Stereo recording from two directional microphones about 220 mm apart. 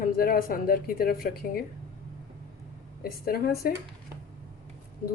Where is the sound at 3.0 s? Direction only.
40° left (ahead or behind).